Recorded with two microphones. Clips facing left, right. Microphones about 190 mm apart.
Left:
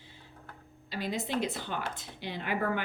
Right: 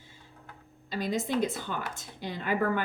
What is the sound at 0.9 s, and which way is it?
Speech, 45° right (ahead or behind).